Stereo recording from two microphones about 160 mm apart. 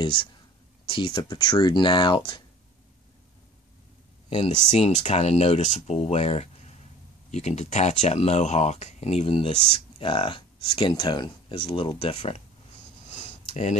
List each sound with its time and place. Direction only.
0.0 s speech: 30° left (ahead or behind)
4.3 s speech: 40° left (ahead or behind)
13.5 s speech: 50° left (ahead or behind)